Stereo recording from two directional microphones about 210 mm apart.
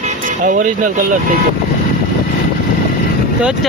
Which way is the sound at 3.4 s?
5° right (ahead or behind).